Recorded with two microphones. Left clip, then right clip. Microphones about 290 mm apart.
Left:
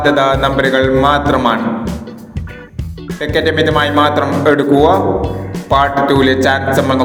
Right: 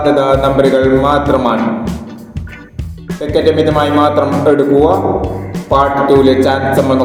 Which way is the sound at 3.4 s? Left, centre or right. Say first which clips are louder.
Right 2 dB; left.